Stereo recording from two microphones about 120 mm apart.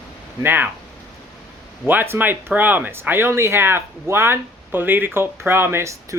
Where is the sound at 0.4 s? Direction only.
15° right (ahead or behind).